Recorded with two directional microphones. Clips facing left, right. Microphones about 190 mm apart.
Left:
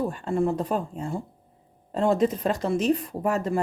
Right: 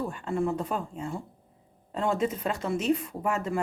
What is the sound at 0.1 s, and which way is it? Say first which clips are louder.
Speech: left 4 dB; 35° left (ahead or behind).